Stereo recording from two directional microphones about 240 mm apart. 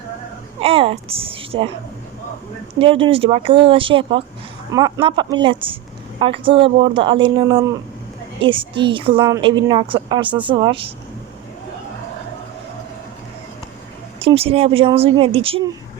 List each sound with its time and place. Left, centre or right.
0.6 s a woman's voice: right
2.7 s a woman's voice: right
14.2 s a woman's voice: right